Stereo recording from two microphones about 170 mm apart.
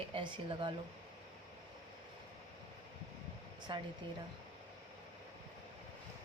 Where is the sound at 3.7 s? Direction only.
30° right (ahead or behind).